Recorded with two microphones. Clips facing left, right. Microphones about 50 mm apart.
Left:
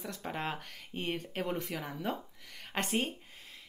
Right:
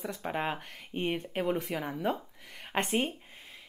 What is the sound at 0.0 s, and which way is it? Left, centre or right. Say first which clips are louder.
Speech: right 4 dB; centre.